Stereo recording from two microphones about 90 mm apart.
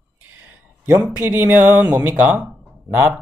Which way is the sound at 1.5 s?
25° right (ahead or behind).